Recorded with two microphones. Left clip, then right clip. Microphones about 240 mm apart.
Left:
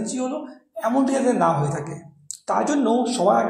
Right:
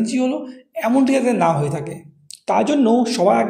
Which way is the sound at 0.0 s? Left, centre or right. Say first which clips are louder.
Right 6 dB; right.